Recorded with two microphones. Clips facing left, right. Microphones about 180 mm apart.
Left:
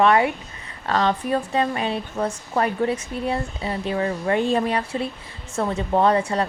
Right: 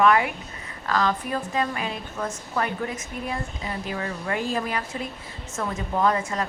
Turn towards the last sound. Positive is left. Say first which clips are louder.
# left 5 dB
turn(degrees=35)  # may be behind; listen again after turning